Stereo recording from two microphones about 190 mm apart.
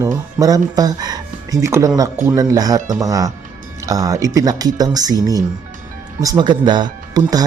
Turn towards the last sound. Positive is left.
turn(degrees=-20)  # may be behind; listen again after turning